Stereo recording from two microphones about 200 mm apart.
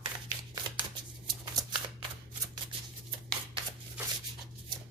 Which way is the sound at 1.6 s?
15° right (ahead or behind).